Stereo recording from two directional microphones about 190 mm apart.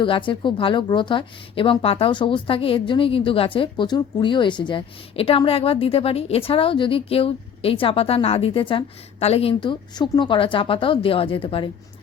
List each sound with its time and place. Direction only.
0.0 s a woman's voice: 25° left (ahead or behind)